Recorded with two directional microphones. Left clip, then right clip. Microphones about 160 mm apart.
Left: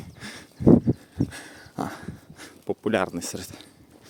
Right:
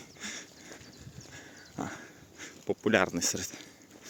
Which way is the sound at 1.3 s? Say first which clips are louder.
Left 7 dB; 45° left (ahead or behind).